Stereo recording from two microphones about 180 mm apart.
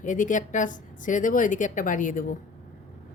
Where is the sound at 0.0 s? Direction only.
45° left (ahead or behind).